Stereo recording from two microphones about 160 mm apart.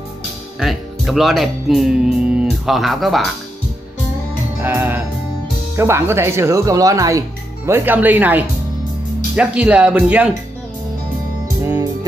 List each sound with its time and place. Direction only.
0.6 s speech: centre (ahead or behind)
4.6 s music: 15° right (ahead or behind)
5.8 s speech: 15° right (ahead or behind)
11.4 s music: 20° right (ahead or behind)